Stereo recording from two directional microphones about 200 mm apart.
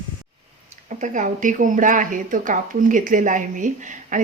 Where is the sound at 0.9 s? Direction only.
40° right (ahead or behind).